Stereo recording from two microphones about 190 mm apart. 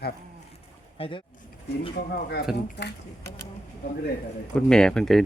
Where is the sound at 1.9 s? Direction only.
55° left (ahead or behind).